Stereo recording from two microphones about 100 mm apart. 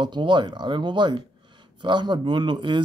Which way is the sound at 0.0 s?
50° right (ahead or behind).